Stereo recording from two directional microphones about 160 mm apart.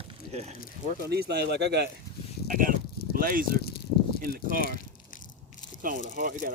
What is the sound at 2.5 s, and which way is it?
Speech, 60° right (ahead or behind).